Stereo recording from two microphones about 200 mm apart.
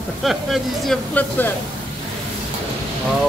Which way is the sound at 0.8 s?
5° left (ahead or behind).